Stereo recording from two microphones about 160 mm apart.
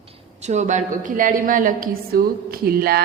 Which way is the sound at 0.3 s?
45° right (ahead or behind).